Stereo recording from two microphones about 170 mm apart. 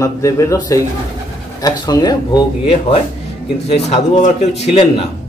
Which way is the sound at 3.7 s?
40° left (ahead or behind).